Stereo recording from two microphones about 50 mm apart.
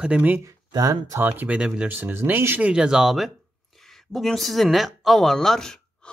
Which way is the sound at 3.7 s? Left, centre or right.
Centre.